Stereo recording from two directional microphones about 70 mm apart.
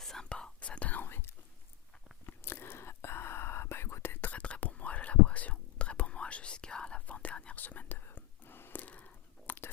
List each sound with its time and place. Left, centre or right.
0.0 s whispering: centre; by 4.3 s left
4.3 s whispering: centre